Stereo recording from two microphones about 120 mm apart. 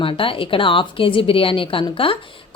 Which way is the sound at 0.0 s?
50° left (ahead or behind).